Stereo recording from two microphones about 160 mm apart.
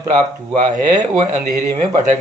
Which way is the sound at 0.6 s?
50° right (ahead or behind).